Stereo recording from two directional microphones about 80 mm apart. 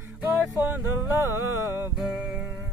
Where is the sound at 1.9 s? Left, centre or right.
Centre.